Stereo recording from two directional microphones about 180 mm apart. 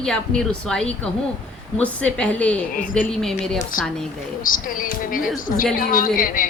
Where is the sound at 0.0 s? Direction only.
5° left (ahead or behind).